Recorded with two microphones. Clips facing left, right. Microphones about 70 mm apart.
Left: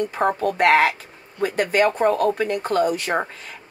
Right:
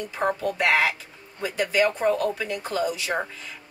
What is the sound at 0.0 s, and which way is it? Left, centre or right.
Speech, left.